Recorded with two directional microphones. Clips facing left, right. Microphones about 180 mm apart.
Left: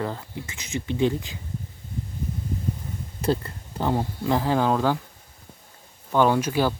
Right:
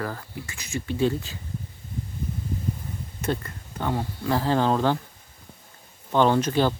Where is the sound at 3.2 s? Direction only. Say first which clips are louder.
Left 4 dB; 30° left (ahead or behind); by 4.9 s 10° left (ahead or behind).